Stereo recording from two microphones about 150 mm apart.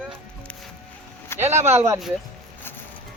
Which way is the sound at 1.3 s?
15° left (ahead or behind).